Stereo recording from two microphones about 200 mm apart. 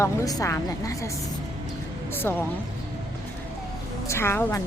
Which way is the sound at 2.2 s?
10° left (ahead or behind).